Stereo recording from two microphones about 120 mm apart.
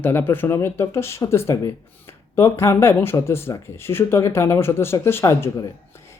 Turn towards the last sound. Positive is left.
turn(degrees=25)  # may be behind; listen again after turning